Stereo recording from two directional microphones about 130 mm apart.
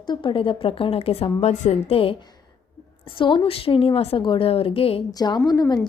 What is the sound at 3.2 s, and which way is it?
A woman's voice, 40° left (ahead or behind).